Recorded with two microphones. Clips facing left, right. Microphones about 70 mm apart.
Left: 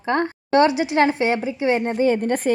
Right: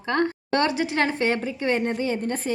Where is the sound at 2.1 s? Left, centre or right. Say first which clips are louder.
Left 6 dB; left.